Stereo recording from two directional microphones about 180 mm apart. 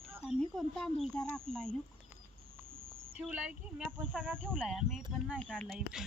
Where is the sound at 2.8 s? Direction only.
90° right.